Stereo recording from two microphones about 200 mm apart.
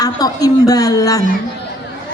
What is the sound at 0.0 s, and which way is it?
A woman's voice, 20° left (ahead or behind).